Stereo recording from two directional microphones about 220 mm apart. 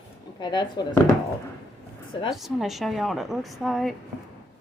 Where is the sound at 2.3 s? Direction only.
Centre (ahead or behind).